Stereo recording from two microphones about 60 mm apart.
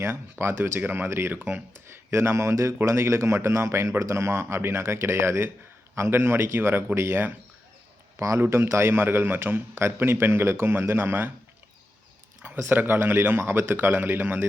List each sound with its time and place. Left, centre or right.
0.0 s a man's voice: right
0.8 s a man's voice: right
1.0 s a man's voice: right
1.3 s a man's voice: right
8.1 s speech: right
8.4 s a man's voice: right
12.6 s a man's voice: right